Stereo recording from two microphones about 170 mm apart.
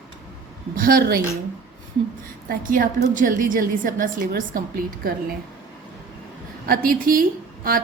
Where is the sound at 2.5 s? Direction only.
55° right (ahead or behind).